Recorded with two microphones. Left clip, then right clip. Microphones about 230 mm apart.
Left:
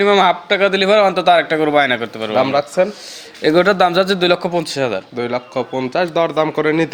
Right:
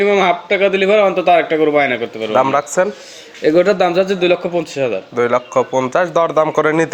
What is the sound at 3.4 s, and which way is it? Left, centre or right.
A man's voice, left.